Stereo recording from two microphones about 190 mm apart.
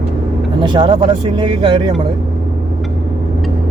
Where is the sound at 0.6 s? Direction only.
25° right (ahead or behind).